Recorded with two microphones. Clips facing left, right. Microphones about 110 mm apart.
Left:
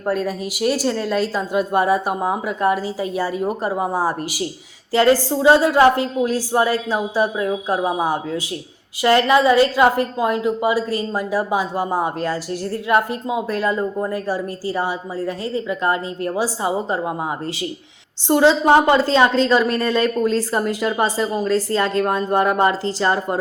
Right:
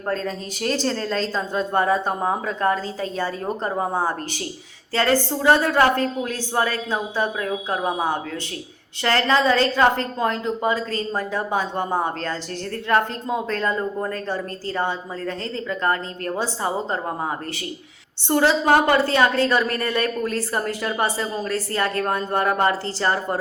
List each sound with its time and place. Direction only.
0.0 s a woman's voice: 10° left (ahead or behind)
18.3 s a woman's voice: 20° left (ahead or behind)